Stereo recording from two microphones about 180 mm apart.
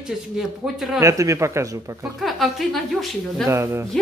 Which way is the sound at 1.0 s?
15° right (ahead or behind).